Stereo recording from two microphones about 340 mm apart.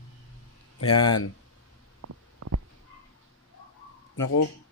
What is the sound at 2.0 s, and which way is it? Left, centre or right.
Stomach rumble, right.